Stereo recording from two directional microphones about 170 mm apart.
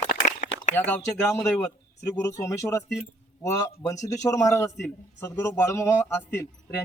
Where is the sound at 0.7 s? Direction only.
10° left (ahead or behind).